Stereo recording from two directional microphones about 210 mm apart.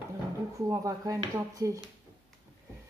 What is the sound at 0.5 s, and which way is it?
Speech, 15° right (ahead or behind).